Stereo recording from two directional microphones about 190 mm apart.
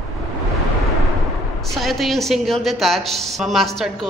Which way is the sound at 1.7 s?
Centre (ahead or behind).